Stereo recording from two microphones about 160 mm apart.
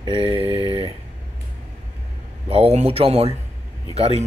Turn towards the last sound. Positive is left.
turn(degrees=-40)  # may be behind; listen again after turning